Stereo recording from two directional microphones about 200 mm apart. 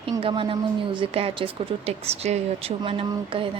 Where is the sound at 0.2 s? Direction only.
25° right (ahead or behind).